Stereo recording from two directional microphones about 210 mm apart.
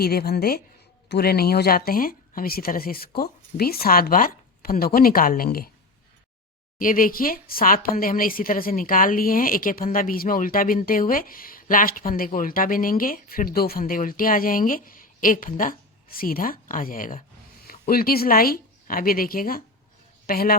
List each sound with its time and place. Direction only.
0.0 s speech: 45° left (ahead or behind)
6.7 s speech: 40° left (ahead or behind)